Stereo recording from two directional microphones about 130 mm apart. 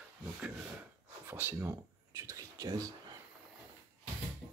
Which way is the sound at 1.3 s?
15° right (ahead or behind).